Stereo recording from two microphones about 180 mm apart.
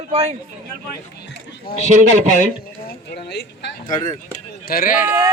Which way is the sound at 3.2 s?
65° left (ahead or behind).